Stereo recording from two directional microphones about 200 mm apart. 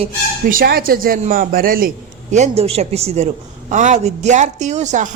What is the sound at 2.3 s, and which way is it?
A woman's voice, 35° right (ahead or behind).